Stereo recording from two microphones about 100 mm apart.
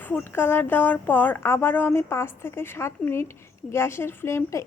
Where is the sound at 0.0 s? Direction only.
20° left (ahead or behind).